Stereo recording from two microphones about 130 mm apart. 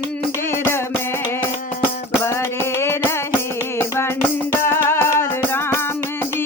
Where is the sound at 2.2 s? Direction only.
20° left (ahead or behind).